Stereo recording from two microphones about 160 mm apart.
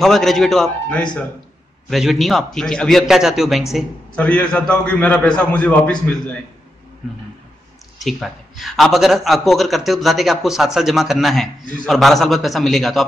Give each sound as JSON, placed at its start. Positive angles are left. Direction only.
{"t": 0.0, "sound": "a man's voice", "side_deg": 0}
{"t": 8.0, "sound": "a man's voice", "side_deg": 0}